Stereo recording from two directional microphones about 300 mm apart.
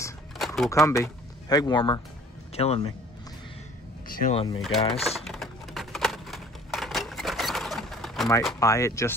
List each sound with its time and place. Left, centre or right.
0.0 s a sound: centre
2.5 s a man's voice: centre
4.1 s speech: centre
5.0 s typing: centre